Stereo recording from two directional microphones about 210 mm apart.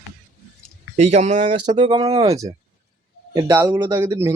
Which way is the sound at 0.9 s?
30° right (ahead or behind).